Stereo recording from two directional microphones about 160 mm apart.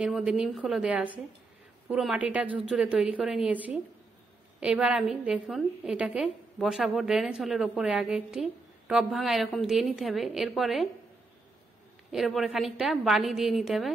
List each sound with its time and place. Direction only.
0.0 s a woman's voice: 5° right (ahead or behind)
12.1 s a woman's voice: centre (ahead or behind)